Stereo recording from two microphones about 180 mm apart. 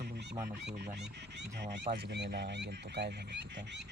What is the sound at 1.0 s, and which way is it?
Speech, 70° right (ahead or behind).